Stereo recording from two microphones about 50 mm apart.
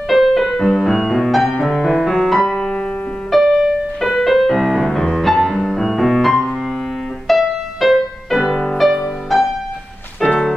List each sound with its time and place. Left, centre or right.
0.1 s music: centre
2.5 s music: left
3.3 s music: centre
10.2 s music: left